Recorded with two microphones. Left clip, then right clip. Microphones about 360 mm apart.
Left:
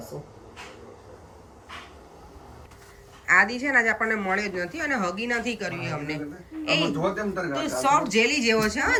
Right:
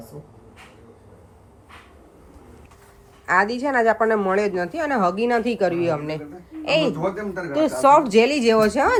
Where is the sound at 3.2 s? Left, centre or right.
Centre.